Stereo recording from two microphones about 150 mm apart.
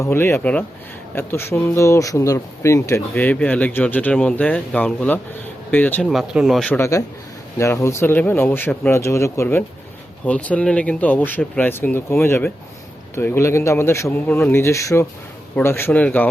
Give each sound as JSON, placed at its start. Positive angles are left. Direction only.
{"t": 0.0, "sound": "speech", "side_deg": 15}
{"t": 6.1, "sound": "speech", "side_deg": 0}
{"t": 6.7, "sound": "speech", "side_deg": 15}